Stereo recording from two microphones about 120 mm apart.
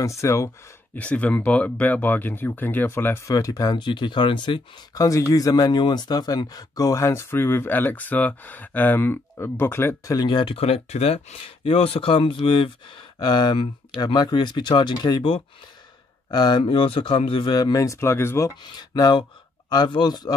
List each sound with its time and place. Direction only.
0.0 s speech: 25° left (ahead or behind)
0.9 s speech: 10° left (ahead or behind); by 4.6 s 40° left (ahead or behind)
4.9 s speech: 30° left (ahead or behind)
10.1 s speech: 40° left (ahead or behind)
16.6 s speech: 50° left (ahead or behind); by 18.5 s 20° left (ahead or behind)
18.6 s speech: 35° left (ahead or behind)